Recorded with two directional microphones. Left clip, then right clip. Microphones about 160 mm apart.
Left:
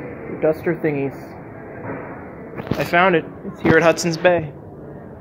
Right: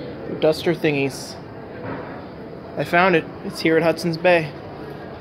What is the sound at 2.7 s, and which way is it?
Speech, 10° right (ahead or behind).